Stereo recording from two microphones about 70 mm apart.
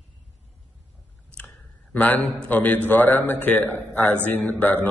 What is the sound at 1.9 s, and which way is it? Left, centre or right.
A man's voice, left.